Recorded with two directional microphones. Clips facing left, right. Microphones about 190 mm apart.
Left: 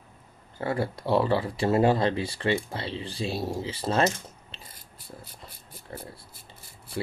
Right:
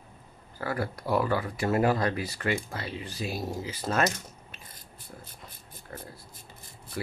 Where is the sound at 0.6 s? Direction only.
25° left (ahead or behind).